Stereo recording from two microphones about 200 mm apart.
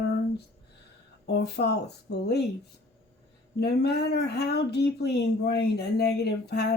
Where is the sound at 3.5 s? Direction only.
55° left (ahead or behind).